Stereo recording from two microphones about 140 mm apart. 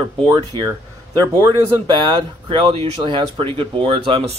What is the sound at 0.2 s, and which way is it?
Speech, 30° right (ahead or behind).